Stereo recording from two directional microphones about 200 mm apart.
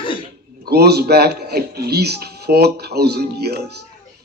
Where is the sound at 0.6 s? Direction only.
55° right (ahead or behind).